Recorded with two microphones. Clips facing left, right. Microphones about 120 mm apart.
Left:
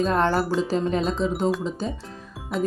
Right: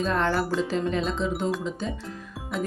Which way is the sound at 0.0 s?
35° left (ahead or behind).